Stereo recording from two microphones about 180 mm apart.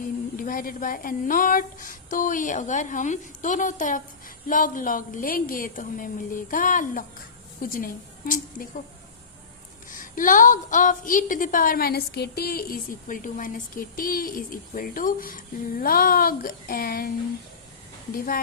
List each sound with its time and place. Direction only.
0.3 s a woman's voice: 50° left (ahead or behind)
9.9 s a woman's voice: 50° left (ahead or behind)